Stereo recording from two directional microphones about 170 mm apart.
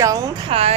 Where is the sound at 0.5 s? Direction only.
35° right (ahead or behind).